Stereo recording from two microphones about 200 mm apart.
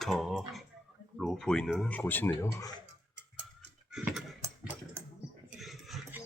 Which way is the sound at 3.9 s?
5° right (ahead or behind).